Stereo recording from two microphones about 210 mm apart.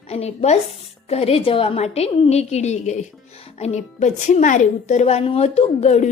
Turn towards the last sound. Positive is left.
turn(degrees=30)  # may be behind; listen again after turning